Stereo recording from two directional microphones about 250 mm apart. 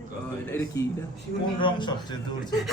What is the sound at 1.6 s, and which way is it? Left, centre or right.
Speech, centre.